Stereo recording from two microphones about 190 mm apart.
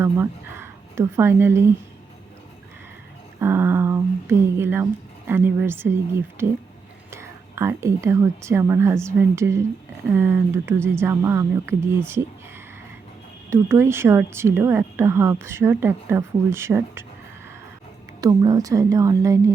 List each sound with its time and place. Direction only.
0.0 s a woman's voice: 15° right (ahead or behind)
3.4 s a sound: 10° right (ahead or behind)
5.3 s a woman's voice: 10° right (ahead or behind)
13.5 s a woman's voice: 15° right (ahead or behind)
18.2 s a woman's voice: 20° right (ahead or behind)